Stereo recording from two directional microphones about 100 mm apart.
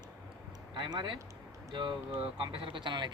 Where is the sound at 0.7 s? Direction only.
50° right (ahead or behind).